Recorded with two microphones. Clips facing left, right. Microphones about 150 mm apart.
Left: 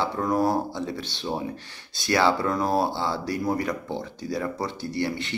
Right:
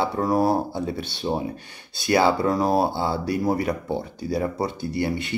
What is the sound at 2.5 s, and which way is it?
Speech, 30° right (ahead or behind).